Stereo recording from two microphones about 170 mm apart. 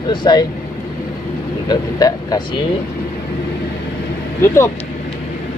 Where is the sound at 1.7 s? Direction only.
20° left (ahead or behind).